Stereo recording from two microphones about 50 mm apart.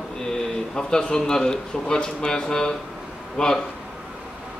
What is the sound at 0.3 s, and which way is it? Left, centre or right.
A man's voice, centre.